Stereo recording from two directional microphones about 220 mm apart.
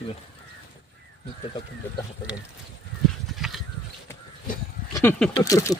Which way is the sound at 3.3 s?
Centre (ahead or behind).